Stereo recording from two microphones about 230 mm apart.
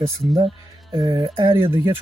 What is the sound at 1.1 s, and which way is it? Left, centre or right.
Speech, right.